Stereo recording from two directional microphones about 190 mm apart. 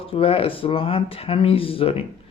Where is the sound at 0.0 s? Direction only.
30° left (ahead or behind).